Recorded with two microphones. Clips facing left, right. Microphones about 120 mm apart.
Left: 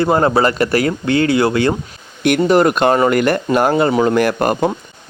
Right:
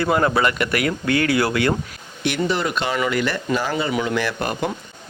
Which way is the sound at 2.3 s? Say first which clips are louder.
Left 10 dB; 50° left (ahead or behind).